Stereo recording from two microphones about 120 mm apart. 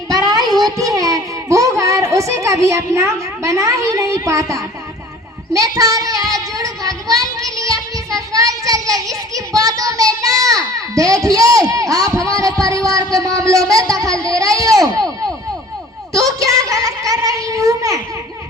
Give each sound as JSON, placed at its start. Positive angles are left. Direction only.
{"t": 0.1, "sound": "child singing", "side_deg": -30}
{"t": 9.6, "sound": "a child's voice", "side_deg": -30}
{"t": 16.1, "sound": "a child's voice", "side_deg": -30}